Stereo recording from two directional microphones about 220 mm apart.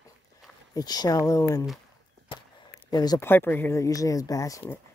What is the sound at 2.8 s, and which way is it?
Speech, 15° left (ahead or behind).